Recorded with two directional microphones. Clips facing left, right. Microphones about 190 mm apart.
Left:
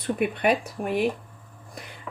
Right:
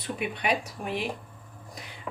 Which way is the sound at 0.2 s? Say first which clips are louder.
Left 5 dB; 50° left (ahead or behind).